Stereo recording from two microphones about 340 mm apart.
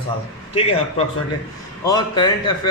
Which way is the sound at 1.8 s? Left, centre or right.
Centre.